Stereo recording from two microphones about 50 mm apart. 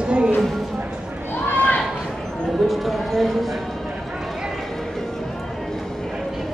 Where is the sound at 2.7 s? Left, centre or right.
Centre.